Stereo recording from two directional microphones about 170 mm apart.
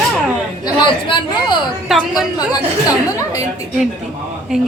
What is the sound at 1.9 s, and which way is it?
Speech, centre (ahead or behind).